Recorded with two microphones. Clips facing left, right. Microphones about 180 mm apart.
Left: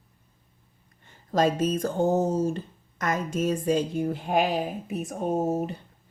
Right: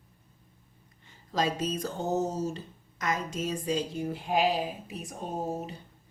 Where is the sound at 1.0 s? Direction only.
50° left (ahead or behind).